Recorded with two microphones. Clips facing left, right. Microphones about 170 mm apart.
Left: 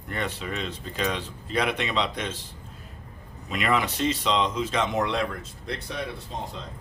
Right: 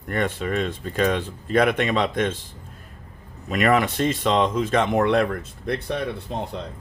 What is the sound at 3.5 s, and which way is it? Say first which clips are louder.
Speech: right 6 dB; 50° right (ahead or behind).